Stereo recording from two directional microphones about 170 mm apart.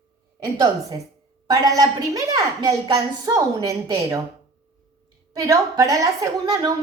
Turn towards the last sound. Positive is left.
turn(degrees=-20)  # may be behind; listen again after turning